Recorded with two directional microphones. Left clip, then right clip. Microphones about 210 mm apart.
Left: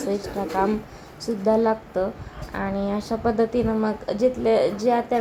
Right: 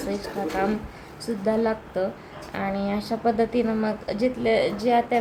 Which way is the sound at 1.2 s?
15° left (ahead or behind).